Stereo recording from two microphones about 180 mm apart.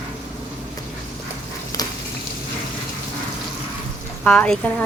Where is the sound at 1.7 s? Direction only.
20° left (ahead or behind).